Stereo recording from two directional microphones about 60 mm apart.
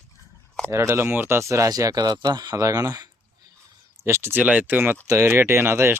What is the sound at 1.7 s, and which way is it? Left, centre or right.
Speech, right.